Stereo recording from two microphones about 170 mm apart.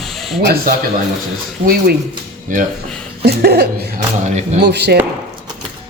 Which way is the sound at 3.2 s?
70° right (ahead or behind).